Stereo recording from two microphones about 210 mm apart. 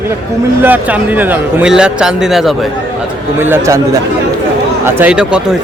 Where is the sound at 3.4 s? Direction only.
10° right (ahead or behind).